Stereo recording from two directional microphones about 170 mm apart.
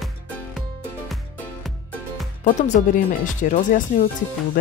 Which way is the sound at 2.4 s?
45° left (ahead or behind).